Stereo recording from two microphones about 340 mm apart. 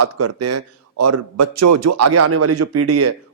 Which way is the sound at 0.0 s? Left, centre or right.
Right.